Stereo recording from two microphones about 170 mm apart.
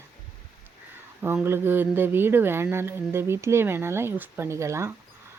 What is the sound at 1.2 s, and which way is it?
Speech, 15° right (ahead or behind).